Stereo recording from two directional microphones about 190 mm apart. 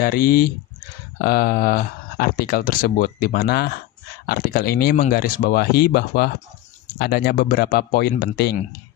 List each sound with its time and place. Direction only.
0.0 s speech: 50° left (ahead or behind)
4.3 s speech: 50° left (ahead or behind)